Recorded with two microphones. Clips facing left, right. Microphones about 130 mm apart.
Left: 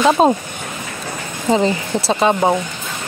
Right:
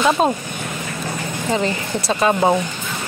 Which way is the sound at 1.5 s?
20° left (ahead or behind).